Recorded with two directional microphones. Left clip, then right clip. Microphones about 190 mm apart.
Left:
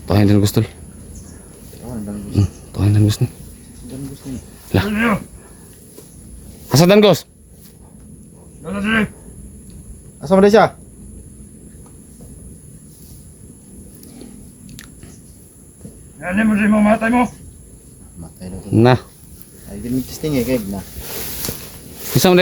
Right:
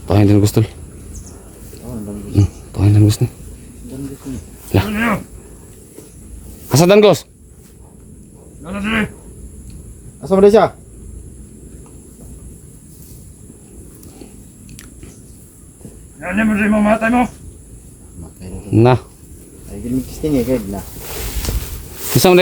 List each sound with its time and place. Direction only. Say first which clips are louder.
0.0 s speech: right 2 dB; 5° left (ahead or behind)
2.3 s a sound: right 3 dB; centre (ahead or behind)
4.7 s speech: even; centre (ahead or behind)
6.7 s speech: right 2 dB; 5° left (ahead or behind)
8.6 s speech: left 1 dB; centre (ahead or behind)
10.2 s speech: right 1 dB; 20° left (ahead or behind)
16.2 s speech: right 1 dB; 5° right (ahead or behind)
18.7 s speech: right 1 dB; 10° left (ahead or behind)
19.7 s speech: right 1 dB; 25° left (ahead or behind)
20.2 s speech: right 2 dB; 10° left (ahead or behind)
21.1 s a sound: right 1 dB; centre (ahead or behind)
22.1 s speech: right 2 dB; 5° right (ahead or behind)